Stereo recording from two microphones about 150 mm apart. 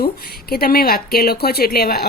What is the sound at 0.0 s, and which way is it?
Speech, 90° left.